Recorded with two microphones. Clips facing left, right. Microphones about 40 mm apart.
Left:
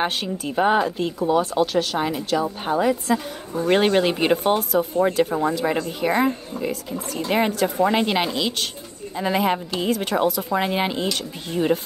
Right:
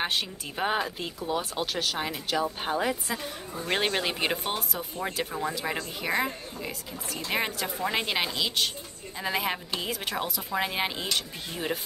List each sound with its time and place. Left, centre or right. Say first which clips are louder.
0.0 s speech: left 6 dB; centre
3.6 s speech: left 10 dB; centre